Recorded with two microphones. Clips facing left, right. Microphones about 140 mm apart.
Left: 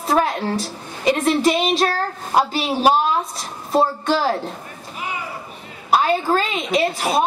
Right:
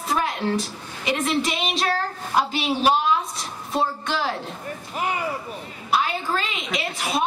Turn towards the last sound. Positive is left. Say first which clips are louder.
# left 7 dB
turn(degrees=40)  # may be behind; listen again after turning